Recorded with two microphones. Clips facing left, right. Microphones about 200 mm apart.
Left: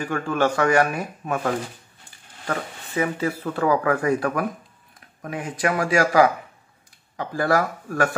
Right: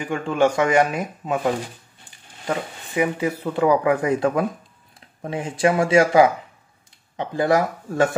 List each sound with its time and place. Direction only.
0.0 s speech: 15° right (ahead or behind)